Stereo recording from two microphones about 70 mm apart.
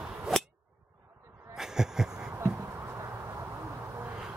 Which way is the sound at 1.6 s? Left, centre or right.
Centre.